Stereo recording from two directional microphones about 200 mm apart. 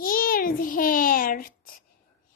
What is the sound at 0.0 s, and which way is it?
Child singing, 45° left (ahead or behind).